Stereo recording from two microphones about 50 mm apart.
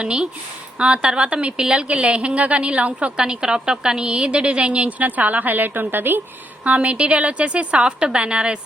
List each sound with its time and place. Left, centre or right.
0.0 s a woman's voice: centre
1.9 s a woman's voice: right
6.7 s a woman's voice: right